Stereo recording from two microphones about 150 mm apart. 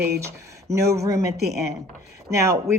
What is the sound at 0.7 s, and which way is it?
Speech, 20° right (ahead or behind).